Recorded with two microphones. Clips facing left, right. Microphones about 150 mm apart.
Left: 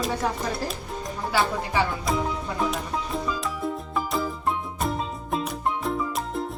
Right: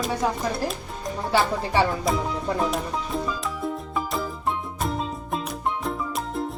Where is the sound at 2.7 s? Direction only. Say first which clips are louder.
Right 2 dB; centre (ahead or behind).